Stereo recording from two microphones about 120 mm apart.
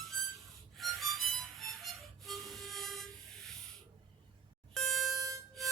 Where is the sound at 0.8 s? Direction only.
Centre (ahead or behind).